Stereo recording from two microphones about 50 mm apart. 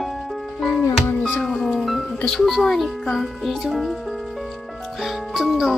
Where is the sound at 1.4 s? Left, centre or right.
Centre.